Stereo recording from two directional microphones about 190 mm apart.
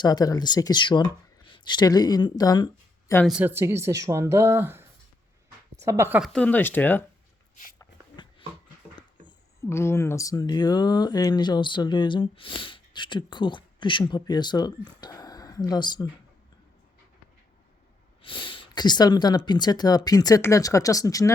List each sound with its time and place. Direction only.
0.0 s speech: 20° left (ahead or behind)
3.2 s speech: 5° right (ahead or behind); by 7.0 s 10° left (ahead or behind)
7.8 s a sound: 25° left (ahead or behind)
9.2 s speech: 15° left (ahead or behind)
18.2 s speech: 25° left (ahead or behind)